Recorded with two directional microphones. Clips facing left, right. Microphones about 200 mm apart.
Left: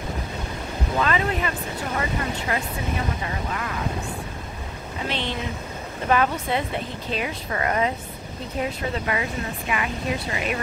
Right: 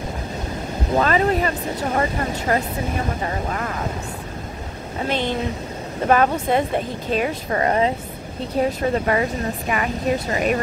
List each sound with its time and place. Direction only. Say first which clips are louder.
0.9 s speech: right 6 dB; 40° right (ahead or behind)
5.0 s speech: right 6 dB; 45° right (ahead or behind)
7.2 s speech: right 6 dB; 35° right (ahead or behind)